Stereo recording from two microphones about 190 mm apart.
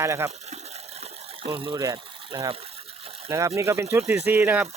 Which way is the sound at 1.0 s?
30° right (ahead or behind).